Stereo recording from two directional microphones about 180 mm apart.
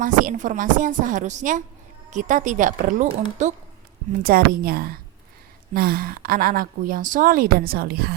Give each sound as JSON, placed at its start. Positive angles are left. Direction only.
{"t": 0.0, "sound": "a woman's voice", "side_deg": -45}
{"t": 4.2, "sound": "a woman's voice", "side_deg": -55}